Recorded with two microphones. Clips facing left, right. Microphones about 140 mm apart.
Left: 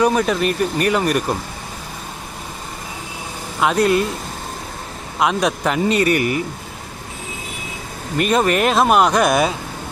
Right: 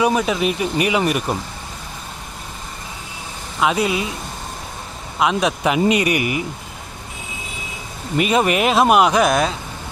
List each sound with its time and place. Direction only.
0.0 s speech: 5° right (ahead or behind)
3.6 s speech: centre (ahead or behind)
5.2 s speech: centre (ahead or behind)
8.2 s speech: 5° right (ahead or behind)